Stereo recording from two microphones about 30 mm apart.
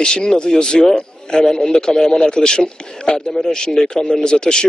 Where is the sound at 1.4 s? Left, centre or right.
Centre.